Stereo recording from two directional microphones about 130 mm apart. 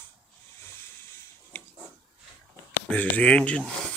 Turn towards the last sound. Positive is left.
turn(degrees=10)  # may be behind; listen again after turning